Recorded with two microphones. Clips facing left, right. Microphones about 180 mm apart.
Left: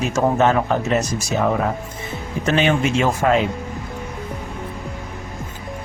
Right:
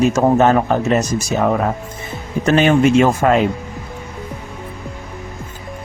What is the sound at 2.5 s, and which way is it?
Speech, 45° right (ahead or behind).